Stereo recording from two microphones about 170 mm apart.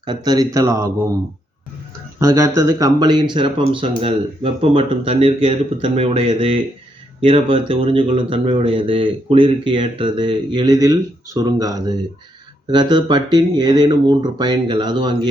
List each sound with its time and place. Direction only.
0.0 s speech: 25° right (ahead or behind)
2.1 s speech: 20° right (ahead or behind)